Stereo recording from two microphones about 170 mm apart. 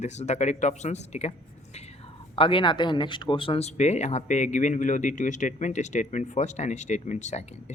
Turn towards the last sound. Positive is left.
turn(degrees=45)  # may be behind; listen again after turning